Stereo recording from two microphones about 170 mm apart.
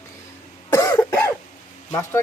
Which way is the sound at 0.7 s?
20° left (ahead or behind).